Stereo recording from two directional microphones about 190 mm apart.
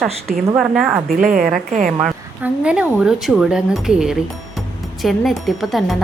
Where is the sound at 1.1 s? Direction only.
45° right (ahead or behind).